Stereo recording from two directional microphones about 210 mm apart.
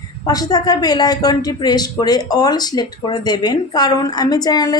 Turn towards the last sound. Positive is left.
turn(degrees=20)  # may be behind; listen again after turning